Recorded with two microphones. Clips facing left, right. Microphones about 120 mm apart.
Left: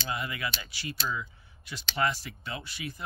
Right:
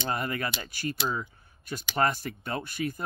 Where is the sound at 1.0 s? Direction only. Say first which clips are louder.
Right 3 dB; 45° right (ahead or behind).